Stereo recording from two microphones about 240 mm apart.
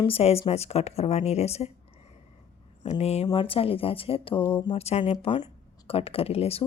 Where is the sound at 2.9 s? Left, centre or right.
Left.